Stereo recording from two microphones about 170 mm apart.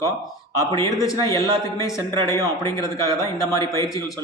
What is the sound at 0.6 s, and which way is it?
A man's voice, 20° left (ahead or behind).